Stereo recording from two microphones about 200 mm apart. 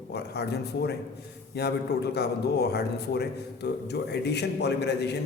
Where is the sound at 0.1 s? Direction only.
55° left (ahead or behind).